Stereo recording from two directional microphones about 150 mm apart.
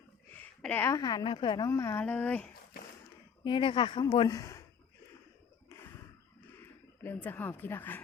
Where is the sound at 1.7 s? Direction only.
20° left (ahead or behind).